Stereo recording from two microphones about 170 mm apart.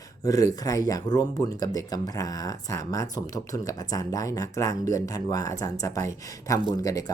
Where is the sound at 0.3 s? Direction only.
20° left (ahead or behind).